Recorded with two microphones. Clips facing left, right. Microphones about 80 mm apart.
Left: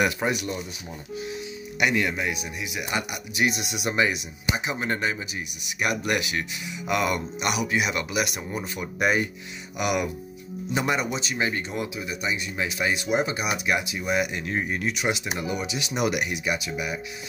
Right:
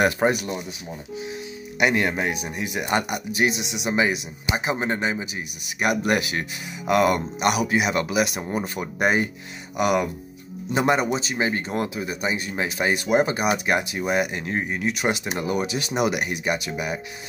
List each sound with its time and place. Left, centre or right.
0.0 s speech: right
3.6 s speech: centre
3.9 s speech: right
14.9 s speech: right
16.0 s speech: right
16.4 s speech: right